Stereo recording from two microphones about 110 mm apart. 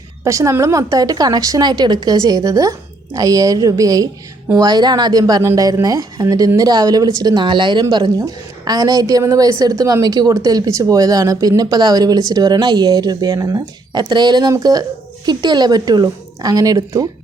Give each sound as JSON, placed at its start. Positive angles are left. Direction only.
{"t": 0.3, "sound": "a woman's voice", "side_deg": -30}